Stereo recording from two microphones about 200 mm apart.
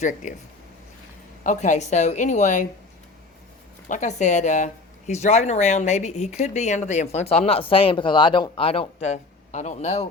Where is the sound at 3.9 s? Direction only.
35° left (ahead or behind).